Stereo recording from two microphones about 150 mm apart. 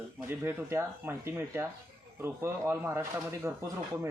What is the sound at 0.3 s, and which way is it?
Speech, 15° right (ahead or behind).